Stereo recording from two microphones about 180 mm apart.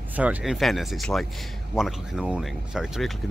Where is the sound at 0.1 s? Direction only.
10° right (ahead or behind).